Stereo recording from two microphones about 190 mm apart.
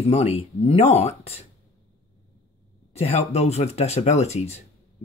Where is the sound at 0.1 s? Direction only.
30° left (ahead or behind).